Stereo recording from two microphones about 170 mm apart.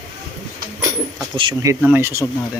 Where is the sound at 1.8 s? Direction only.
15° right (ahead or behind).